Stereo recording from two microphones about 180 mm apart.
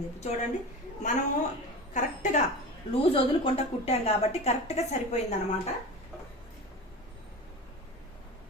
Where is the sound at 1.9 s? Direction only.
40° left (ahead or behind).